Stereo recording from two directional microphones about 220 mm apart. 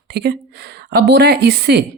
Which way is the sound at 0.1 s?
50° right (ahead or behind).